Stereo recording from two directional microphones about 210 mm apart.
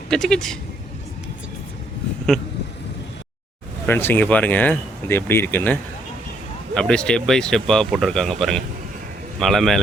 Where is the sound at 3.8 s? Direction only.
10° left (ahead or behind).